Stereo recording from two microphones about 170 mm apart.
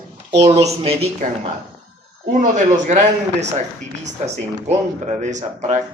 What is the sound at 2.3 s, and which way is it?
Speech, 50° right (ahead or behind).